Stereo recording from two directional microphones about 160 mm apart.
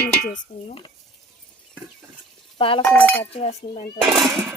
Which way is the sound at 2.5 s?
30° left (ahead or behind).